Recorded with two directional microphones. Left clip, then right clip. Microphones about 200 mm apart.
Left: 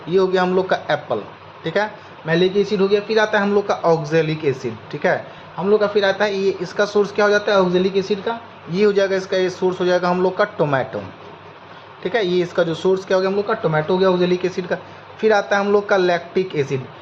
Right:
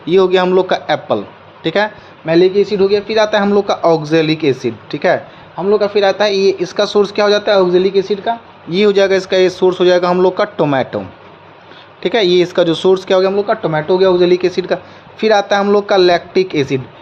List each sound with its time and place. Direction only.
0.1 s a man's voice: 50° right (ahead or behind)
12.0 s a man's voice: 50° right (ahead or behind)